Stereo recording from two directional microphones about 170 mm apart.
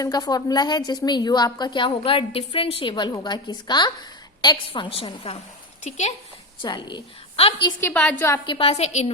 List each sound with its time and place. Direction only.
0.0 s a woman's voice: 25° left (ahead or behind); by 6.1 s 45° left (ahead or behind)
6.6 s a woman's voice: 30° left (ahead or behind)
7.8 s a woman's voice: 10° left (ahead or behind)
8.4 s a woman's voice: 35° left (ahead or behind)